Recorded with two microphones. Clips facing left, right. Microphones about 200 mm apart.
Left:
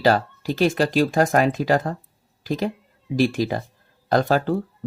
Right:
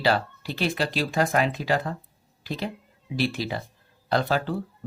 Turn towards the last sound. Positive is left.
turn(degrees=45)  # may be behind; listen again after turning